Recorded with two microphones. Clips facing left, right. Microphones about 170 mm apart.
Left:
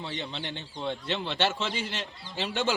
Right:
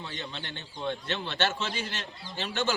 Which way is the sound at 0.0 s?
25° left (ahead or behind).